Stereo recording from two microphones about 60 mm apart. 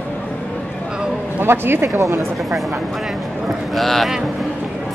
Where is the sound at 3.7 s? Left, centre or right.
Centre.